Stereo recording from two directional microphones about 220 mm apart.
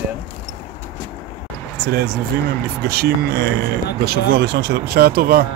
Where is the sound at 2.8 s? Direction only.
45° right (ahead or behind).